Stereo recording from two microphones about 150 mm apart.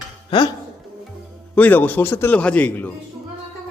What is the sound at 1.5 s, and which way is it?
A man's voice, 10° left (ahead or behind).